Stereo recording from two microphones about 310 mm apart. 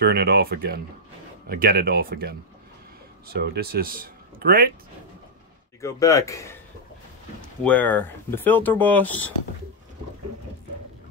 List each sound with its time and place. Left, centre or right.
0.0 s speech: right
3.3 s speech: right
5.8 s speech: centre
7.6 s speech: centre